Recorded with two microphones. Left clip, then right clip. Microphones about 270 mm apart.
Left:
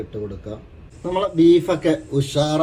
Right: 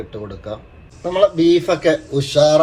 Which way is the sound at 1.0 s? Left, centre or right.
Centre.